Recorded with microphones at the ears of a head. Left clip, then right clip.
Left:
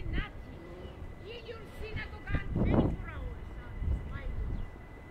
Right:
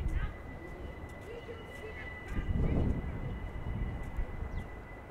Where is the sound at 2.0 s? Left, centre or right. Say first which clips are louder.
Left 3 dB; left.